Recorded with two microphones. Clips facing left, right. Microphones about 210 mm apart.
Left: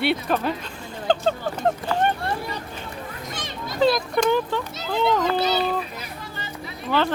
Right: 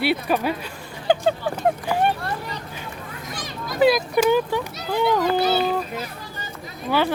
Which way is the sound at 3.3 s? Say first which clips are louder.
Right 3 dB; 25° left (ahead or behind).